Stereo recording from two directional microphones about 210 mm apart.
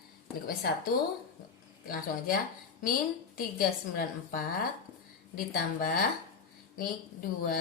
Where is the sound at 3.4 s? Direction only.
45° left (ahead or behind).